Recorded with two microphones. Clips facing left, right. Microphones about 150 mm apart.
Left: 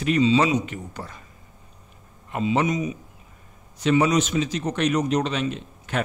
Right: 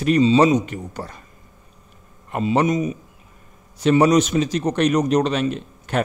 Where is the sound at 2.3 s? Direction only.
50° right (ahead or behind).